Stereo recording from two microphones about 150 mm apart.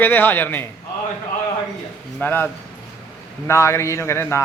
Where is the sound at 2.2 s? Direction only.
15° left (ahead or behind).